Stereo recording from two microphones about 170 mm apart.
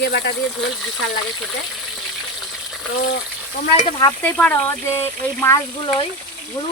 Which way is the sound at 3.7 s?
30° left (ahead or behind).